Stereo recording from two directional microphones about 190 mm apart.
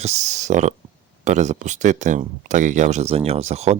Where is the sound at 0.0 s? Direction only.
35° right (ahead or behind).